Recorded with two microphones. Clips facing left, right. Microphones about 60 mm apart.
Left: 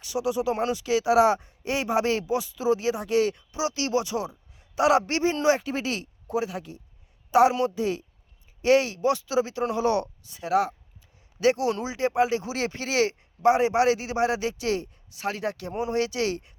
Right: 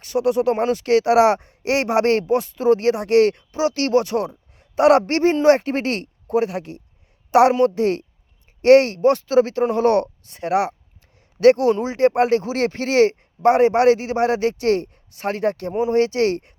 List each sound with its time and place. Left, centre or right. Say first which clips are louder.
0.0 s speech: right 8 dB; right
3.5 s a woman's voice: right 8 dB; right
11.3 s speech: right 9 dB; right